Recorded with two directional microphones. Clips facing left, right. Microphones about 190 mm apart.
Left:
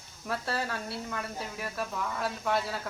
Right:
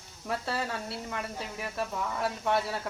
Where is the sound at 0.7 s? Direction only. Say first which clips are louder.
Even; 25° right (ahead or behind).